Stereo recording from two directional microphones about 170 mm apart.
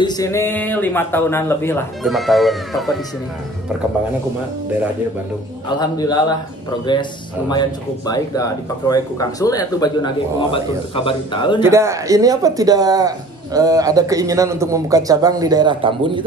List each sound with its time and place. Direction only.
0.0 s speech: 20° left (ahead or behind)
2.0 s speech: centre (ahead or behind)
5.7 s speech: 25° left (ahead or behind)
11.6 s speech: 15° right (ahead or behind)